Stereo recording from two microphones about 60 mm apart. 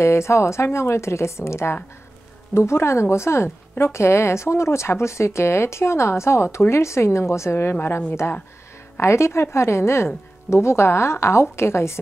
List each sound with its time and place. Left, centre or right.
0.0 s a woman's voice: left